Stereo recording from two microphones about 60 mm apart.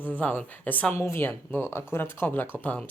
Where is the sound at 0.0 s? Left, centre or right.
Left.